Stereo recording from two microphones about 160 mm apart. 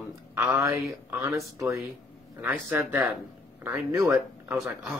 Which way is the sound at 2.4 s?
15° right (ahead or behind).